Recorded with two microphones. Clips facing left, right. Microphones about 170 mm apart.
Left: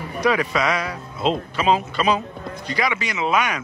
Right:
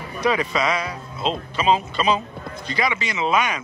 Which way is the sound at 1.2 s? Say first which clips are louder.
Left 2 dB; 5° left (ahead or behind).